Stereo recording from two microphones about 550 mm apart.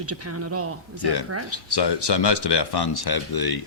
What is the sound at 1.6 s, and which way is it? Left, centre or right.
Speech, left.